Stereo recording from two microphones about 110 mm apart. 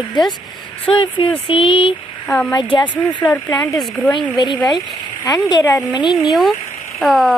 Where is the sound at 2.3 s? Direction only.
10° left (ahead or behind).